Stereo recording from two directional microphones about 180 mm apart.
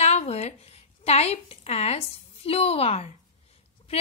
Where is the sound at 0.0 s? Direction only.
35° left (ahead or behind).